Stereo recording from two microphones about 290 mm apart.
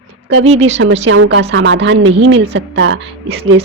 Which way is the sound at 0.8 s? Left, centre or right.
Right.